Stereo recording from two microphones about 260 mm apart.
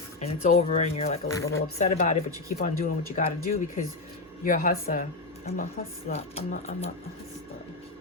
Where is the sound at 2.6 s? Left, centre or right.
Left.